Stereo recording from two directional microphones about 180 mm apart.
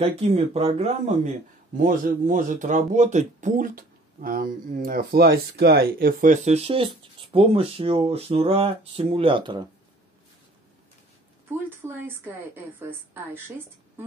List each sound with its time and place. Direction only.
0.1 s speech: 35° right (ahead or behind)
1.8 s speech: 50° right (ahead or behind); by 9.7 s 25° right (ahead or behind)
11.8 s a woman's voice: 10° right (ahead or behind)